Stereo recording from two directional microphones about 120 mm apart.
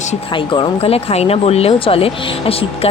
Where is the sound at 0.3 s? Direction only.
45° left (ahead or behind).